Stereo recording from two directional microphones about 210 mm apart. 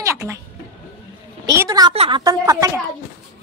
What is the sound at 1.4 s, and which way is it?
Speech, 15° right (ahead or behind).